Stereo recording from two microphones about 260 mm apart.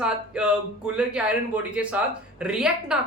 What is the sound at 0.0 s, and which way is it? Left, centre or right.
Speech, centre.